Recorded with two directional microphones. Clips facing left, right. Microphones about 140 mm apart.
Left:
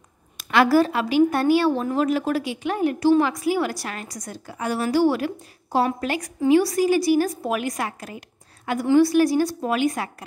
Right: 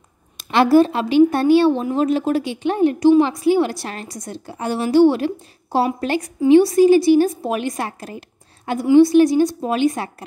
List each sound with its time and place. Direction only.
0.4 s a woman's voice: 25° right (ahead or behind)